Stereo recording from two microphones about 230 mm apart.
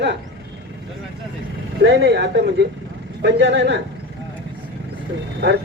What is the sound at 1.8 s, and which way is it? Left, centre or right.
A man's voice, right.